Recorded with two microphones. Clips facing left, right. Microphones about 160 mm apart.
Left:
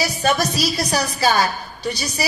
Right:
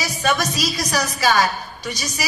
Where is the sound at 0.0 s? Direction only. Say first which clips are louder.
Left 2 dB; 30° left (ahead or behind).